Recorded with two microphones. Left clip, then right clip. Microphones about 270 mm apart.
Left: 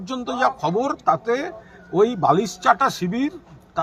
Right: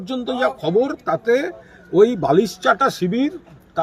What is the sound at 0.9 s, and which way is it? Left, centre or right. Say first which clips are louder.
A man's voice: right 2 dB; centre.